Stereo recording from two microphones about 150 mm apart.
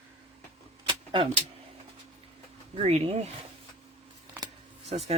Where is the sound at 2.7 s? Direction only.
45° right (ahead or behind).